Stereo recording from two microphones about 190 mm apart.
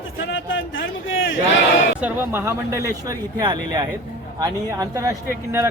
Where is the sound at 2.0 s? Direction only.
10° right (ahead or behind).